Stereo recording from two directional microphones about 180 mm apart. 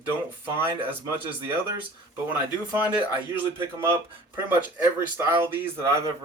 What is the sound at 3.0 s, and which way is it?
Speech, 15° right (ahead or behind).